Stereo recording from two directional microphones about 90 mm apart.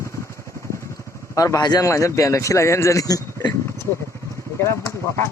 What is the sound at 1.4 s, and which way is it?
Speech, 40° left (ahead or behind).